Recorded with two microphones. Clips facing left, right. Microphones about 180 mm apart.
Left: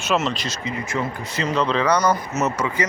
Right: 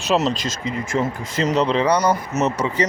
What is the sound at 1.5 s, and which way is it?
Speech, 20° right (ahead or behind).